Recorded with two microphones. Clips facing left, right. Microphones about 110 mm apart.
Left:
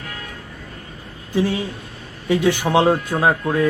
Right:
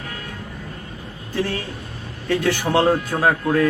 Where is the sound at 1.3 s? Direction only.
15° left (ahead or behind).